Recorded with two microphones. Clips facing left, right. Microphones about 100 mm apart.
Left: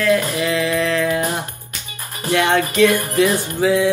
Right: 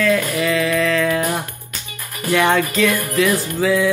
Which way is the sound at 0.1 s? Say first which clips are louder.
Even; 20° left (ahead or behind).